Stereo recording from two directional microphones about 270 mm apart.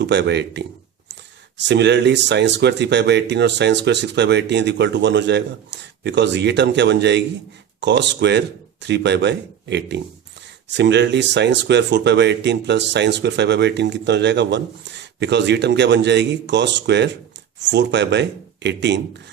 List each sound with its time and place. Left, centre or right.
0.0 s speech: right